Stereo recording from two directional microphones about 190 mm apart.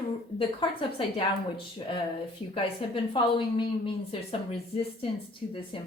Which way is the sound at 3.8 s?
30° left (ahead or behind).